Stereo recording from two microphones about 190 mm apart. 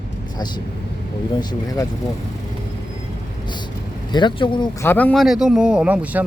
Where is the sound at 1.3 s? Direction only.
20° left (ahead or behind).